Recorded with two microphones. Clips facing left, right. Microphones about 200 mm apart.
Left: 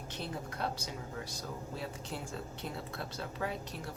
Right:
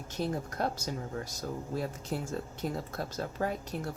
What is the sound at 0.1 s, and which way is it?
Speech, 45° right (ahead or behind).